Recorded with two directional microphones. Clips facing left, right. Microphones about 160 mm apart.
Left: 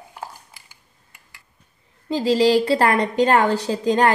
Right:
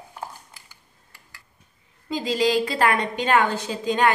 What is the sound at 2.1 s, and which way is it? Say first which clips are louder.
A woman's voice: left 5 dB; 35° left (ahead or behind).